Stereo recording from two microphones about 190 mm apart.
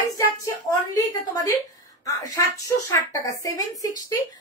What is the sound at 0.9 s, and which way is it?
A woman's voice, 15° left (ahead or behind).